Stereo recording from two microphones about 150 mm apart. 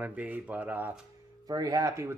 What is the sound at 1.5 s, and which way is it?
Speech, 25° right (ahead or behind).